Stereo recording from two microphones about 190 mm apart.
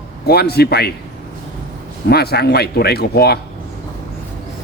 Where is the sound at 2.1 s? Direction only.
55° left (ahead or behind).